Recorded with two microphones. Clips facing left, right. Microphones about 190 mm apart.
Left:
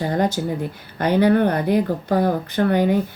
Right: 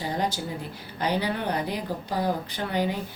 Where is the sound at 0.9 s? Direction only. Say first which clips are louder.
Left 11 dB; 55° left (ahead or behind).